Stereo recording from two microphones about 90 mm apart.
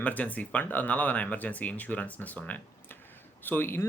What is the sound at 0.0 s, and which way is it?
Speech, 15° left (ahead or behind).